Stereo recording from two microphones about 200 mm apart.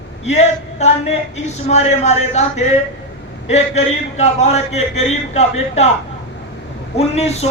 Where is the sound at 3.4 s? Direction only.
35° left (ahead or behind).